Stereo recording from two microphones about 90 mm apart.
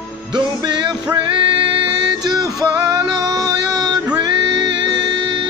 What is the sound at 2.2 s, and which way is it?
Music, 45° right (ahead or behind).